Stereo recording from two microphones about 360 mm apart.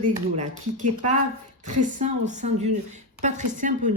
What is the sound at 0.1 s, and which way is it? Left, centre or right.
Speech, centre.